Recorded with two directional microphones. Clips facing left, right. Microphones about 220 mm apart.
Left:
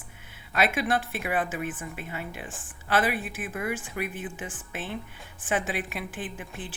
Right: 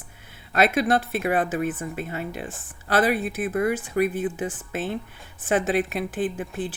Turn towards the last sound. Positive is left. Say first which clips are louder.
# right 9 dB
turn(degrees=-40)  # may be behind; listen again after turning